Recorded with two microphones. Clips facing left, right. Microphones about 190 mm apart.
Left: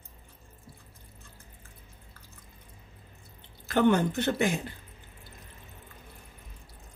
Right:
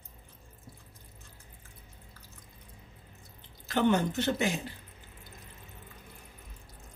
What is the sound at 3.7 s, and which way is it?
Speech, 55° left (ahead or behind).